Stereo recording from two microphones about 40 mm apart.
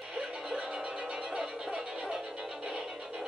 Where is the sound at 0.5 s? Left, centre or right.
Right.